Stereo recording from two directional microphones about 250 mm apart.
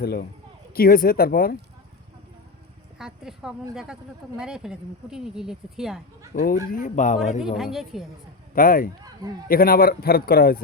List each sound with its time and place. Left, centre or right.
0.0 s a man's voice: left
3.0 s speech: centre
6.3 s a man's voice: left
7.4 s speech: centre
8.5 s a man's voice: left